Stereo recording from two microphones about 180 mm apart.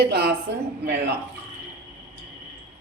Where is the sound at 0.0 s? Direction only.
65° right (ahead or behind).